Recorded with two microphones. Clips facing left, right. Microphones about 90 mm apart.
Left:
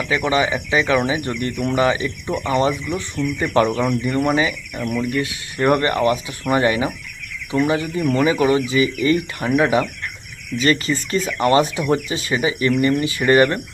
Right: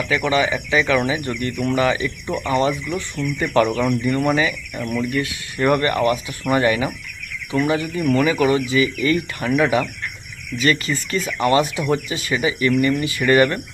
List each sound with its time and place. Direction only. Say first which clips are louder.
0.1 s speech: left 1 dB; 25° left (ahead or behind)